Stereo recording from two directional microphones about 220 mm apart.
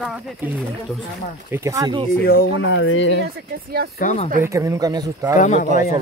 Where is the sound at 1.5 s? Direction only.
15° right (ahead or behind).